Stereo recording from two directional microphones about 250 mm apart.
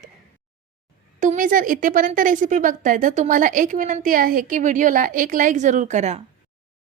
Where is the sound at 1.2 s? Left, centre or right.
Right.